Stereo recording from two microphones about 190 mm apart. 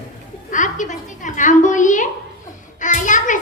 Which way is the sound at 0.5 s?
40° left (ahead or behind).